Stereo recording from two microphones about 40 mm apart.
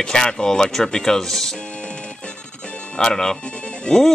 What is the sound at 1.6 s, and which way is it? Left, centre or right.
Music, left.